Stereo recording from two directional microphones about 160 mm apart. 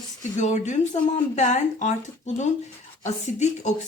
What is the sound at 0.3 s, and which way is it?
Speech, 50° left (ahead or behind).